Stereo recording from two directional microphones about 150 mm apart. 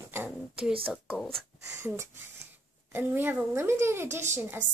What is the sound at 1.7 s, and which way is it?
A woman's voice, 15° right (ahead or behind).